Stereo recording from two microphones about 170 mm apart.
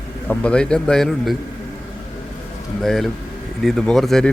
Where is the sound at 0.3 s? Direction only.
5° left (ahead or behind).